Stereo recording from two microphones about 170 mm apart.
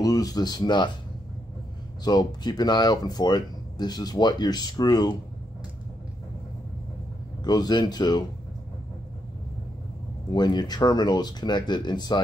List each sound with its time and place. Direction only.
0.0 s speech: 20° left (ahead or behind)
2.0 s speech: 25° left (ahead or behind)
7.4 s speech: 25° left (ahead or behind)
10.3 s speech: 25° left (ahead or behind)